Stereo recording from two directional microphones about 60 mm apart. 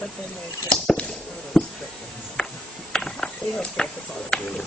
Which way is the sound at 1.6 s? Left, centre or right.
Centre.